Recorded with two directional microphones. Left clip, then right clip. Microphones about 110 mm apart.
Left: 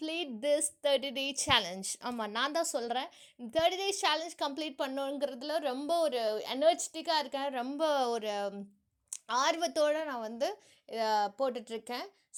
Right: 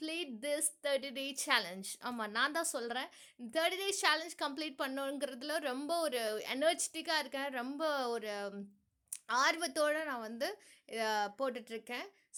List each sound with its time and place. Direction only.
0.0 s a woman's voice: 20° left (ahead or behind)
7.8 s a woman's voice: 30° left (ahead or behind)
9.2 s a woman's voice: 15° left (ahead or behind)